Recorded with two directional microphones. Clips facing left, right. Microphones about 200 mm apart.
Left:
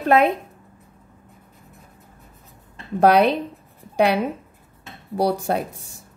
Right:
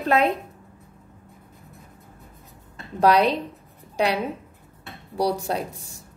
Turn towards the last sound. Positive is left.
turn(degrees=55)  # may be behind; listen again after turning